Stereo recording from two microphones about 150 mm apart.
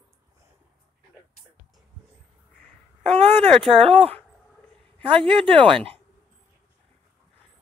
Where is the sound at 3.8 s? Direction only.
40° right (ahead or behind).